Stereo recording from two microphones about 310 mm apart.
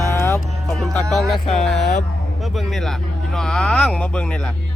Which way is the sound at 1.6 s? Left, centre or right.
Centre.